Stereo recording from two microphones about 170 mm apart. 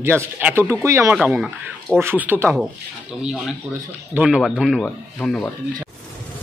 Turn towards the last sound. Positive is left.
turn(degrees=5)  # may be behind; listen again after turning